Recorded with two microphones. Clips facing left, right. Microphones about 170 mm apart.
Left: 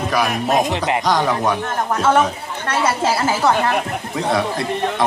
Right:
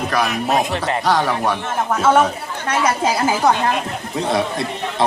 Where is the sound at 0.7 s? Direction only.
15° left (ahead or behind).